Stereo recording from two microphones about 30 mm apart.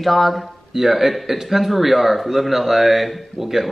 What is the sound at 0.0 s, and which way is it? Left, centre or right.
Speech, centre.